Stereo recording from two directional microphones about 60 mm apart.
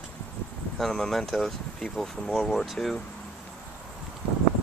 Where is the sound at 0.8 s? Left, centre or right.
Centre.